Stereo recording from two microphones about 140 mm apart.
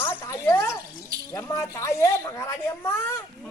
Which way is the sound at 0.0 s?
20° left (ahead or behind).